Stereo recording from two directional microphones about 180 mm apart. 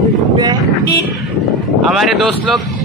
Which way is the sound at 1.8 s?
Centre (ahead or behind).